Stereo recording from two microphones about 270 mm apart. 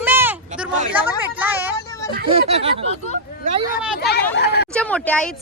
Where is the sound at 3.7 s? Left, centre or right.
Left.